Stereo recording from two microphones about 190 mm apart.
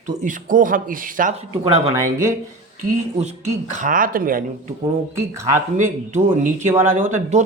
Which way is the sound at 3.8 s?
45° right (ahead or behind).